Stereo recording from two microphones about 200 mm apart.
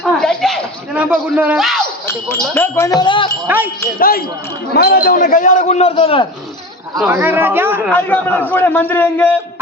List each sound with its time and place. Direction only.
0.0 s a sound: 5° left (ahead or behind)
2.0 s a man's voice: 10° left (ahead or behind)
3.4 s a man's voice: 10° right (ahead or behind)
4.0 s a man's voice: 50° left (ahead or behind); by 6.2 s 25° left (ahead or behind)
7.1 s a man's voice: 10° right (ahead or behind)
7.9 s a man's voice: 10° left (ahead or behind)